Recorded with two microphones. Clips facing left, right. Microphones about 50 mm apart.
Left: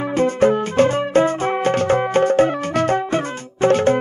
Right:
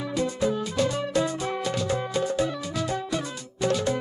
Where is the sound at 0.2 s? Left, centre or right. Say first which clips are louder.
Left 10 dB; left.